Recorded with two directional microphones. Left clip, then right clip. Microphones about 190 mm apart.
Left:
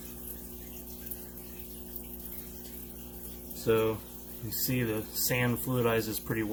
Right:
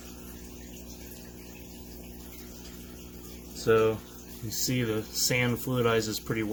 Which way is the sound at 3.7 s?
25° right (ahead or behind).